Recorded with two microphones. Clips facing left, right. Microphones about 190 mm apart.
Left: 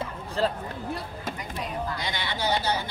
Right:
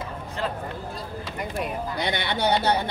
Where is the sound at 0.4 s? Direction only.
35° left (ahead or behind).